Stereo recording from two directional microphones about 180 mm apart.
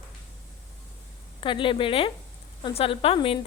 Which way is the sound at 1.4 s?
25° left (ahead or behind).